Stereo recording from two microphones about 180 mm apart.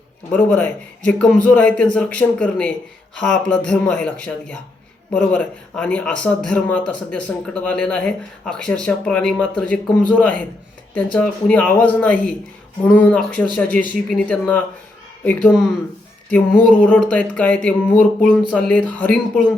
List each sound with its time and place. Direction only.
0.3 s speech: 5° left (ahead or behind)
16.3 s speech: 10° left (ahead or behind)